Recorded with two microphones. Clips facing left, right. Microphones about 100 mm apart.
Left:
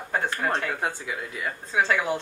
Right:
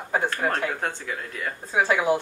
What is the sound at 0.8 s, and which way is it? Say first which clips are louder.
Speech: even; 10° left (ahead or behind).